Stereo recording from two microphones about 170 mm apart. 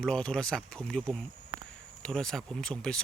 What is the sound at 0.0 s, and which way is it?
Speech, 5° left (ahead or behind).